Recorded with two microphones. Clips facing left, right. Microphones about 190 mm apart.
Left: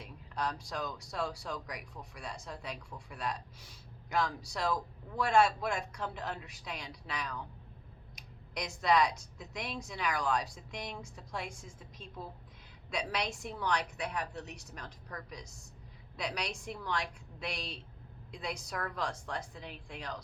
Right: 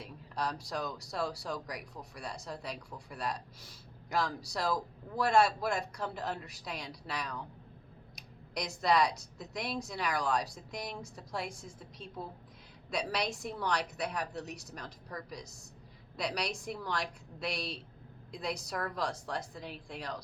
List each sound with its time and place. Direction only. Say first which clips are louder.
0.0 s speech: even; 35° right (ahead or behind)
8.5 s speech: even; 35° right (ahead or behind)